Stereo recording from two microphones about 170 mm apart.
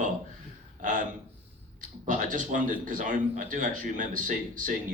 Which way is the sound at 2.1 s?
50° right (ahead or behind).